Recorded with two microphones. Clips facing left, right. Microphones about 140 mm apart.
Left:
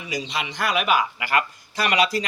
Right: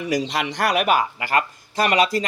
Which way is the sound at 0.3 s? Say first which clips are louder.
Right 4 dB; 80° right.